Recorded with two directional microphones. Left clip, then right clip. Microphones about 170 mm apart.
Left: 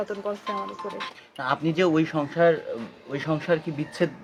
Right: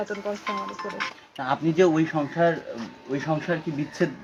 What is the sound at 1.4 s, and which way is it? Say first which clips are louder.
A woman's voice: right 2 dB; 30° left (ahead or behind).